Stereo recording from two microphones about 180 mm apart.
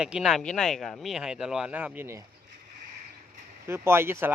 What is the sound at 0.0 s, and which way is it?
Speech, 5° right (ahead or behind).